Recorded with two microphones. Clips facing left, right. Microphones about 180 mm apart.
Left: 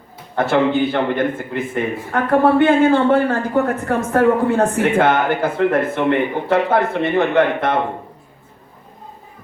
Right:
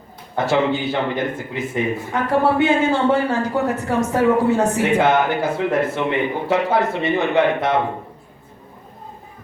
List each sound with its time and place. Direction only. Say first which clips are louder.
0.3 s a man's voice: left 3 dB; 55° left (ahead or behind)